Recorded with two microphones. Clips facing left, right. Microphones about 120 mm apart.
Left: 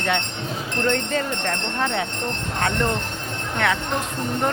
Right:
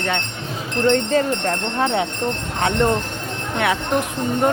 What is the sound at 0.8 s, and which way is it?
Speech, 25° right (ahead or behind).